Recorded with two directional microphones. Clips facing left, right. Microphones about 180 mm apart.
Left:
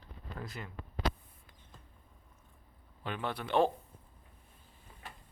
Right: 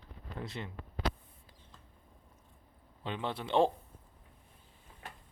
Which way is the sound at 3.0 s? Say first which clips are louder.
Even; 25° right (ahead or behind).